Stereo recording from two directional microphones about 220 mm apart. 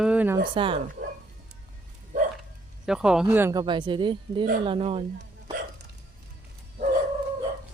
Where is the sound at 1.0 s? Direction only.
35° right (ahead or behind).